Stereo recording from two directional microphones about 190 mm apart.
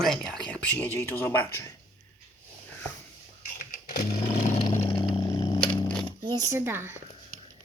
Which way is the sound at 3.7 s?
50° left (ahead or behind).